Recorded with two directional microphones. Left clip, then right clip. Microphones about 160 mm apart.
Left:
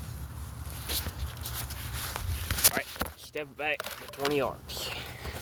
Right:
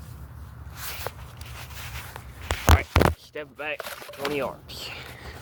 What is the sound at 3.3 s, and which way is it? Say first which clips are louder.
Speech: even; 25° left (ahead or behind).